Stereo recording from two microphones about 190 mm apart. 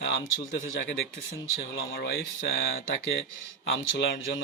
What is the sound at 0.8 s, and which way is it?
Speech, 75° left (ahead or behind).